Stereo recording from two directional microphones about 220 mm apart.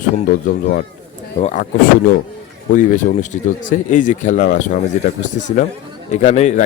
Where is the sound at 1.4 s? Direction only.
30° left (ahead or behind).